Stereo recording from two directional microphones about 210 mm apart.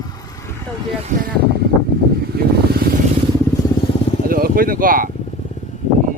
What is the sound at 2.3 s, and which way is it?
Vehicle, 45° right (ahead or behind).